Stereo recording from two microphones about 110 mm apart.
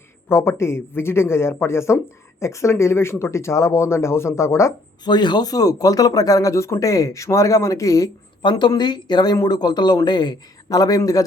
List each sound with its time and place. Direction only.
0.3 s speech: 25° left (ahead or behind)
5.0 s speech: 40° left (ahead or behind)
8.4 s speech: 45° left (ahead or behind)